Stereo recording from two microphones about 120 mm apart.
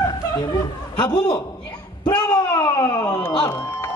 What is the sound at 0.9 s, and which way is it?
Speech, 35° left (ahead or behind).